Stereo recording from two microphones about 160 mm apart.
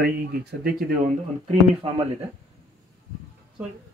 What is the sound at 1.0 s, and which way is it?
Speech, 45° right (ahead or behind).